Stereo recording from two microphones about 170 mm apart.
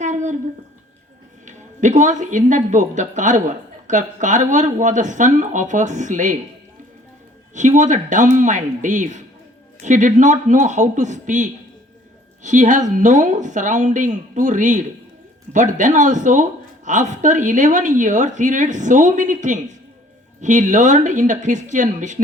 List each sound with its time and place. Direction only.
0.0 s a sound: 45° right (ahead or behind)
1.5 s a woman's voice: 45° right (ahead or behind)
7.5 s a woman's voice: 45° right (ahead or behind)